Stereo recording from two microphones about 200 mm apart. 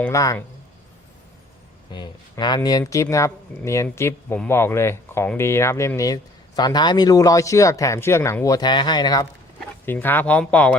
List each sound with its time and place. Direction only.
0.0 s speech: 15° left (ahead or behind)
1.9 s speech: 20° left (ahead or behind)
9.8 s speech: 10° left (ahead or behind)